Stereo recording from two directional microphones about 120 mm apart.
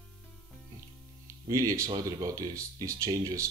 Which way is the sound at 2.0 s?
30° right (ahead or behind).